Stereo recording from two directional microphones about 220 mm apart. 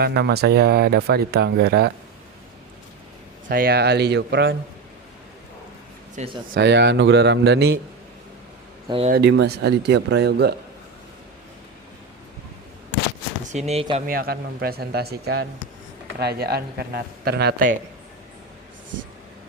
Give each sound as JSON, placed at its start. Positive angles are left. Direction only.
{"t": 0.0, "sound": "speech", "side_deg": -45}
{"t": 3.5, "sound": "speech", "side_deg": -45}
{"t": 6.1, "sound": "speech", "side_deg": -25}
{"t": 6.5, "sound": "speech", "side_deg": -50}
{"t": 8.9, "sound": "speech", "side_deg": -25}
{"t": 9.1, "sound": "speech", "side_deg": -50}
{"t": 13.5, "sound": "speech", "side_deg": -30}
{"t": 14.1, "sound": "speech", "side_deg": -45}